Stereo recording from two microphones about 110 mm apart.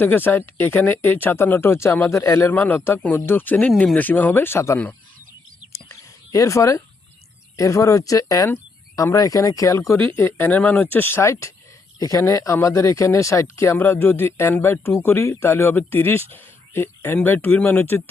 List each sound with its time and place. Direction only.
0.0 s speech: 20° left (ahead or behind)
2.5 s speech: 15° left (ahead or behind)
5.7 s a sound: 30° left (ahead or behind)
7.5 s speech: 30° left (ahead or behind)
10.0 s speech: 15° left (ahead or behind)